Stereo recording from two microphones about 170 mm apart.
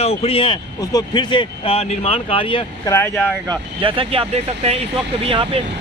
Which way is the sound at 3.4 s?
30° right (ahead or behind).